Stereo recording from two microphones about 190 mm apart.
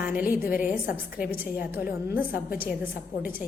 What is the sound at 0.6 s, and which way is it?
A woman's voice, 10° right (ahead or behind).